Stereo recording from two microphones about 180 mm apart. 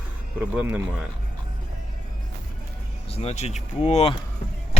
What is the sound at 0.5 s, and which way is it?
Speech, 10° right (ahead or behind).